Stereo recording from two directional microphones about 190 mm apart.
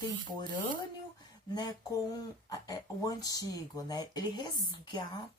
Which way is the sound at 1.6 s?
20° left (ahead or behind).